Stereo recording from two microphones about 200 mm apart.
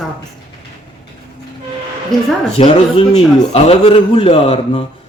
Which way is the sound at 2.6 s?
25° left (ahead or behind).